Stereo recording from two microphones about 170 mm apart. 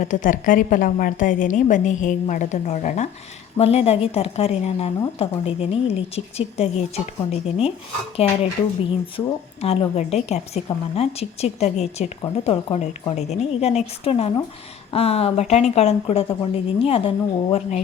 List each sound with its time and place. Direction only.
0.0 s a woman's voice: 50° left (ahead or behind)
8.2 s speech: 35° left (ahead or behind)